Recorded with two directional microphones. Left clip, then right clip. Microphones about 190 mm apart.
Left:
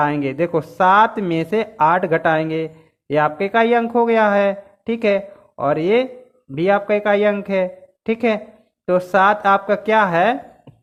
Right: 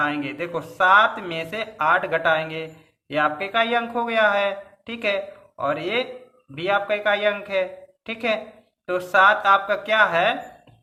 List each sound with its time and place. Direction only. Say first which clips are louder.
0.0 s speech: left 6 dB; 55° left (ahead or behind)